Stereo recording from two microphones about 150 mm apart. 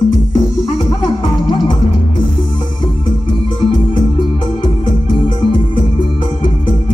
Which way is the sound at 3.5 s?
35° left (ahead or behind).